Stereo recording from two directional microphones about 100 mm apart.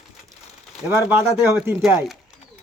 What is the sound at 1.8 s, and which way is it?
Speech, centre (ahead or behind).